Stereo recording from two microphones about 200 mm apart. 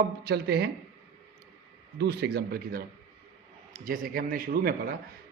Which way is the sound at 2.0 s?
55° right (ahead or behind).